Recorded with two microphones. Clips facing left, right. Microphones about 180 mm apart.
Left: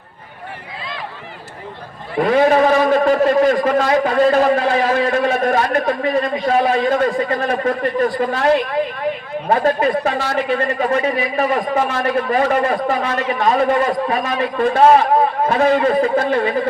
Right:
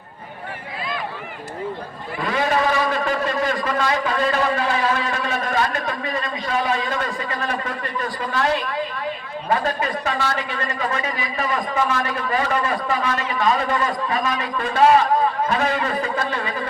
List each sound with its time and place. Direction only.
2.2 s a man's voice: 55° left (ahead or behind)
10.1 s a man's voice: 55° left (ahead or behind)
15.5 s a man's voice: 45° left (ahead or behind)